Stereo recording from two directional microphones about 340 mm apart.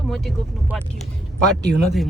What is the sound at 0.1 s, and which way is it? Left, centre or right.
Speech, centre.